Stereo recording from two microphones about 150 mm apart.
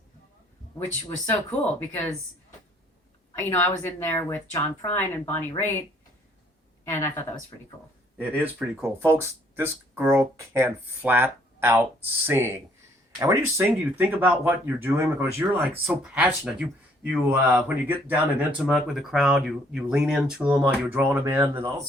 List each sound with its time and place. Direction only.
1.3 s speech: 10° left (ahead or behind)
3.5 s speech: 20° left (ahead or behind)
6.9 s speech: 15° left (ahead or behind)
8.5 s speech: 15° right (ahead or behind)